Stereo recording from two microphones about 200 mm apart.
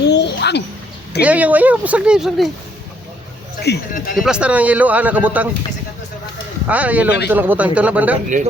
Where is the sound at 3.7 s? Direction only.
55° left (ahead or behind).